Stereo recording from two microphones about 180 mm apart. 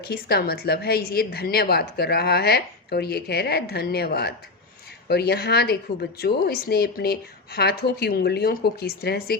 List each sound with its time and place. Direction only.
0.0 s speech: 60° left (ahead or behind)